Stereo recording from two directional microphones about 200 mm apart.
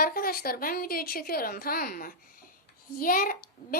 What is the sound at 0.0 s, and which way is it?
A woman's voice, 45° left (ahead or behind).